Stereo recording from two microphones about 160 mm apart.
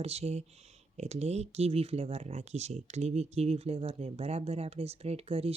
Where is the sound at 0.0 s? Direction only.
40° right (ahead or behind).